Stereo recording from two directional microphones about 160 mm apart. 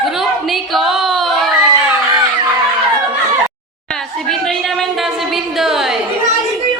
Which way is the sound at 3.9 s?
5° left (ahead or behind).